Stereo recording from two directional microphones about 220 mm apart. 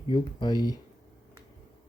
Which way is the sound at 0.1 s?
20° left (ahead or behind).